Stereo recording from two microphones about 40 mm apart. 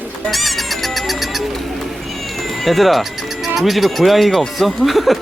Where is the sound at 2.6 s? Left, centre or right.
Centre.